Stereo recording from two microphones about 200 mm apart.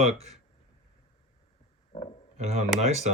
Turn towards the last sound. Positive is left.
turn(degrees=-35)  # may be behind; listen again after turning